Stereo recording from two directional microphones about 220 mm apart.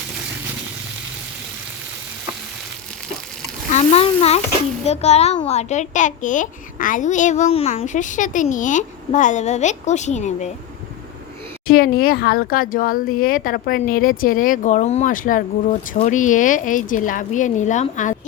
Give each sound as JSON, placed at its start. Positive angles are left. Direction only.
{"t": 3.7, "sound": "a sound", "side_deg": 30}
{"t": 4.9, "sound": "a child's voice", "side_deg": 30}
{"t": 11.7, "sound": "a child's voice", "side_deg": 40}